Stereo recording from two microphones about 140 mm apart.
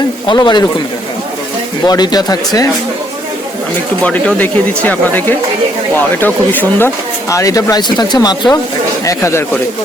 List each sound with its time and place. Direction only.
0.3 s speech: 35° left (ahead or behind)
1.8 s speech: 30° left (ahead or behind)
4.0 s speech: 10° left (ahead or behind); by 8.5 s 30° left (ahead or behind)
9.0 s speech: 20° left (ahead or behind)